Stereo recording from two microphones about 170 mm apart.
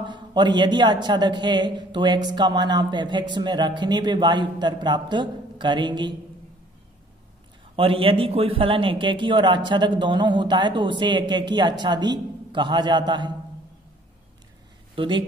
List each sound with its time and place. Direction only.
0.0 s a man's voice: 25° right (ahead or behind)
7.7 s a man's voice: 30° right (ahead or behind)
15.0 s a man's voice: 30° right (ahead or behind)